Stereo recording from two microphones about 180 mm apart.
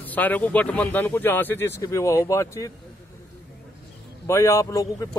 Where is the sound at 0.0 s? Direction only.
10° left (ahead or behind).